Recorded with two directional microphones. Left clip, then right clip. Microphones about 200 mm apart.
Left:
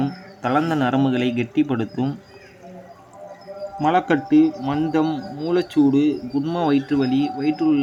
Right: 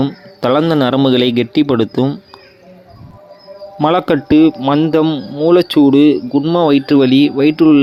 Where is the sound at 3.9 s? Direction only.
45° right (ahead or behind).